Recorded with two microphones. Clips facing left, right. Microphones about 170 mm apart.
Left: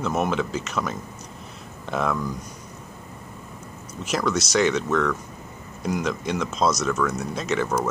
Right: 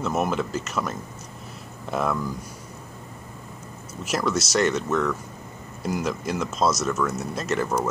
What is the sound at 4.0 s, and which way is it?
Speech, 5° right (ahead or behind).